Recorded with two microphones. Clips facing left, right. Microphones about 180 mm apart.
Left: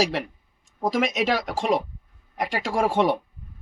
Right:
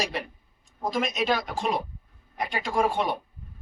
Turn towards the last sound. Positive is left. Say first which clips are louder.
# left 4 dB
turn(degrees=85)